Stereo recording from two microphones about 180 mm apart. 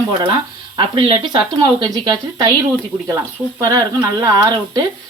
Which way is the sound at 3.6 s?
20° right (ahead or behind).